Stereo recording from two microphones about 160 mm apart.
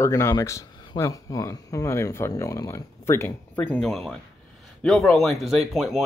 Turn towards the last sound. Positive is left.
turn(degrees=0)  # may be behind; listen again after turning